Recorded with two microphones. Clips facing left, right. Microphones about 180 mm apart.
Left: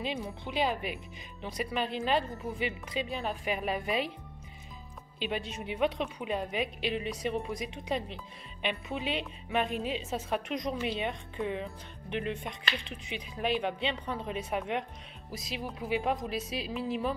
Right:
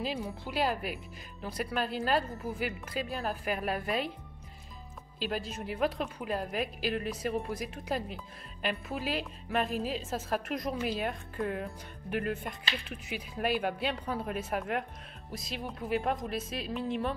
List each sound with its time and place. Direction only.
0.0 s a woman's voice: centre (ahead or behind)
5.2 s a woman's voice: centre (ahead or behind)